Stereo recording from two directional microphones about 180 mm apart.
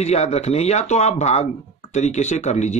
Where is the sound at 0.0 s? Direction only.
35° left (ahead or behind).